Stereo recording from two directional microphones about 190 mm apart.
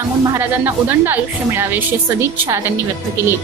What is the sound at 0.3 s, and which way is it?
A woman's voice, 15° right (ahead or behind).